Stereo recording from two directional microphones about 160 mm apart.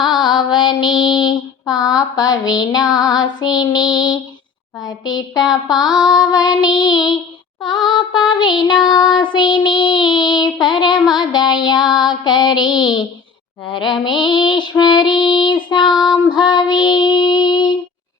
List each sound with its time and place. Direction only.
0.1 s female singing: 30° left (ahead or behind)
2.0 s child singing: 25° left (ahead or behind)
14.3 s child singing: 30° left (ahead or behind)